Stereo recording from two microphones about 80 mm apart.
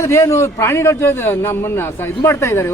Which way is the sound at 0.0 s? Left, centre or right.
Left.